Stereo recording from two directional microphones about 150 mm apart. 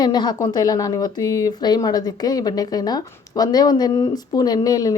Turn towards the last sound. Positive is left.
turn(degrees=25)  # may be behind; listen again after turning